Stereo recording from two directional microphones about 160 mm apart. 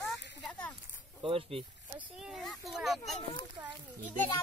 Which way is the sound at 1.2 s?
35° right (ahead or behind).